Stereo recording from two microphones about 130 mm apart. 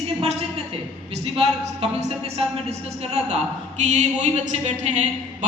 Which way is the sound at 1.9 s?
55° right (ahead or behind).